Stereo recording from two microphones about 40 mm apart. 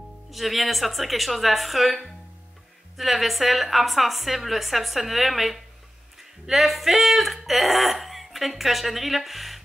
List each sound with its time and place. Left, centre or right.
0.3 s a woman's voice: centre